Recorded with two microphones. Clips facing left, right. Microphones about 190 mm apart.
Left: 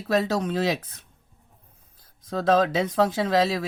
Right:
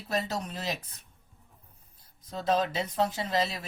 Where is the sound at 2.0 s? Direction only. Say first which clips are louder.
Left 7 dB; 90° left.